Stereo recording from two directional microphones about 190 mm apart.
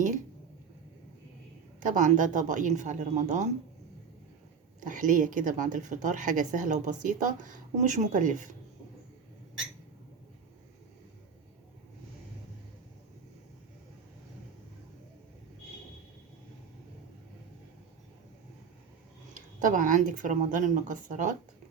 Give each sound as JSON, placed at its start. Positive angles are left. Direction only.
{"t": 1.8, "sound": "speech", "side_deg": -40}
{"t": 4.8, "sound": "speech", "side_deg": -45}
{"t": 19.6, "sound": "speech", "side_deg": -45}